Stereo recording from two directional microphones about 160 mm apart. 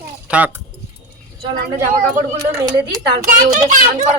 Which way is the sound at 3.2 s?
50° right (ahead or behind).